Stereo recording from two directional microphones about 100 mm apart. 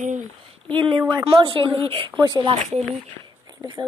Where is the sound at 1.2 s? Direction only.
60° right (ahead or behind).